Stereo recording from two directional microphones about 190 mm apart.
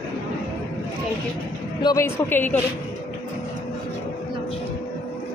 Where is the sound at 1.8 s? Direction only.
15° left (ahead or behind).